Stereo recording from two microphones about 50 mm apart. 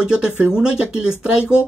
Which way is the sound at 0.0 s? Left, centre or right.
Centre.